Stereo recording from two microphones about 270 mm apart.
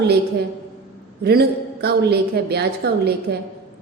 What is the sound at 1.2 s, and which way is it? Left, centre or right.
A woman's voice, right.